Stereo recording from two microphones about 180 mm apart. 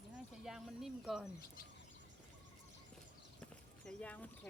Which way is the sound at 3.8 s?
5° left (ahead or behind).